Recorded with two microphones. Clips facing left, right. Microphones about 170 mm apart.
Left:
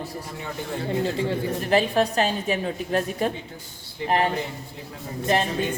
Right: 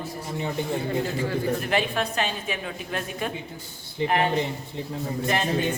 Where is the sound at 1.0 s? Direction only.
25° left (ahead or behind).